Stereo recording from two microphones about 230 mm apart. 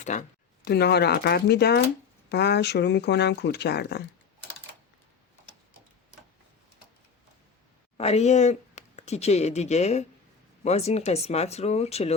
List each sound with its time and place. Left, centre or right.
0.0 s a sound: left
0.7 s speech: left
7.9 s speech: left